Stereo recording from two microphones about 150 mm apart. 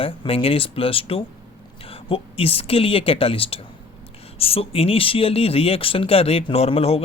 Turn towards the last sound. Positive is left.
turn(degrees=40)  # may be behind; listen again after turning